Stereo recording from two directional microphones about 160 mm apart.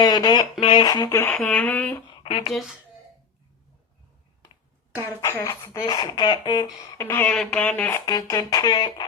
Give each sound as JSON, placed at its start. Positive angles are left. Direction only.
{"t": 0.0, "sound": "speech", "side_deg": 25}
{"t": 2.2, "sound": "speech", "side_deg": 35}
{"t": 5.2, "sound": "speech", "side_deg": 15}